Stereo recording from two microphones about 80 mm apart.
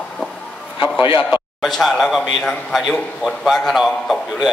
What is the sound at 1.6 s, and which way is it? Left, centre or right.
Speech, centre.